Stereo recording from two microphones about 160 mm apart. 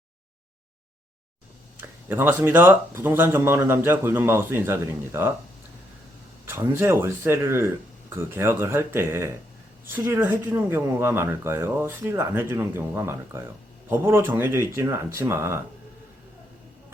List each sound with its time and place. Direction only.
1.8 s speech: 10° right (ahead or behind)
6.4 s speech: 15° right (ahead or behind)